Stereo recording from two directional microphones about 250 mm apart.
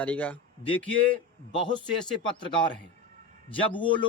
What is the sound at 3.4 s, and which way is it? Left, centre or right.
Speech, centre.